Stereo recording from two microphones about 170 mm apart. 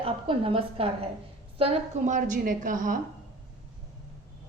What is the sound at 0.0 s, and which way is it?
A woman's voice, 35° right (ahead or behind).